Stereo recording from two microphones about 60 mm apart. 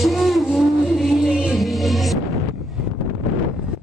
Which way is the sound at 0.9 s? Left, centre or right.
Centre.